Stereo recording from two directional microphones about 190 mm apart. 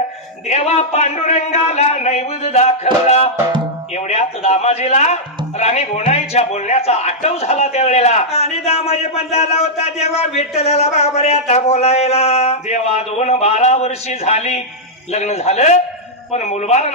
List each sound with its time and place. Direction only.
0.5 s a man's voice: 35° left (ahead or behind)